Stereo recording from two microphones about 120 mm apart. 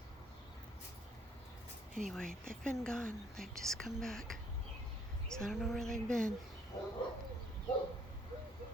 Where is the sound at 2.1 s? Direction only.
5° left (ahead or behind).